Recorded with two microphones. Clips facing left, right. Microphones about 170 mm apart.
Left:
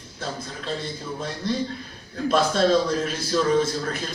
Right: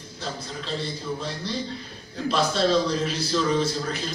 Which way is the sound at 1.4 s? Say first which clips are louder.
Left 4 dB; 50° left (ahead or behind).